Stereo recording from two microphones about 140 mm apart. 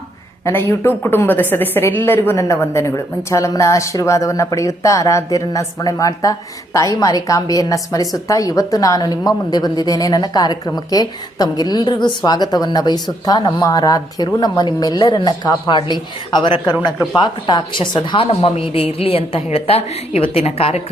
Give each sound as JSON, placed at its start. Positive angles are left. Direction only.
{"t": 0.4, "sound": "a woman's voice", "side_deg": 15}